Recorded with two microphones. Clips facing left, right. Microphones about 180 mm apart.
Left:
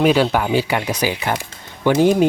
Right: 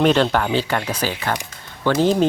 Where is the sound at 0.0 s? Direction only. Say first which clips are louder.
Left 1 dB; 10° left (ahead or behind).